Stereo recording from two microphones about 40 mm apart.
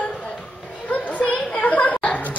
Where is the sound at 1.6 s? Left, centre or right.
Left.